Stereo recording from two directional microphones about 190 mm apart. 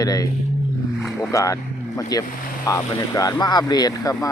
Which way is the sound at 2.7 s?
20° left (ahead or behind).